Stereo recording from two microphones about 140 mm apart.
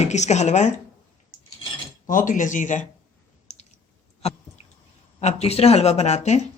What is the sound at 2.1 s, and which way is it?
Speech, 70° left (ahead or behind).